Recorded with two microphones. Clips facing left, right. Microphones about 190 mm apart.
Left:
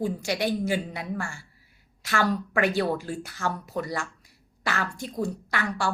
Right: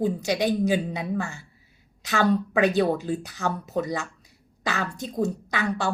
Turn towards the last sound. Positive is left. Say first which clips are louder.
# right 2 dB
turn(degrees=-20)  # may be behind; listen again after turning